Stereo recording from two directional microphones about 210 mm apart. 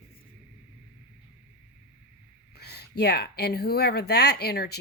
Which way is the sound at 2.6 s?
50° left (ahead or behind).